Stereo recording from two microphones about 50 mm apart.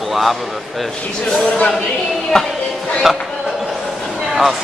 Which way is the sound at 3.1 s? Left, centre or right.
Centre.